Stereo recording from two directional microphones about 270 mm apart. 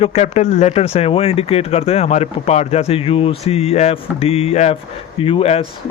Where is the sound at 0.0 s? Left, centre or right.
Left.